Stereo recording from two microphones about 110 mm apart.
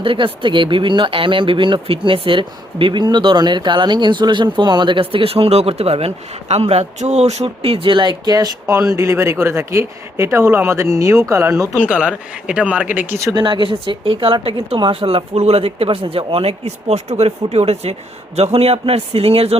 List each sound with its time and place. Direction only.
0.0 s speech: 50° right (ahead or behind); by 11.7 s 30° right (ahead or behind)
11.7 s speech: 10° right (ahead or behind)
13.3 s speech: 45° right (ahead or behind); by 19.5 s 65° right (ahead or behind)